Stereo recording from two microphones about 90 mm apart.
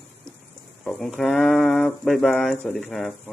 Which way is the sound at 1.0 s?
5° left (ahead or behind).